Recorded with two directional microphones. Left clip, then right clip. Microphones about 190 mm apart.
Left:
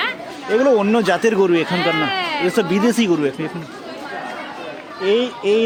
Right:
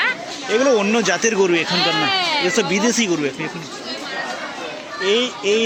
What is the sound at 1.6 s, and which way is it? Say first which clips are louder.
Speech: right 1 dB; 15° left (ahead or behind).